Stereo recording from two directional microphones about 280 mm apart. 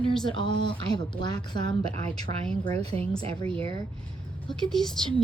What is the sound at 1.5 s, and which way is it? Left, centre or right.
Speech, right.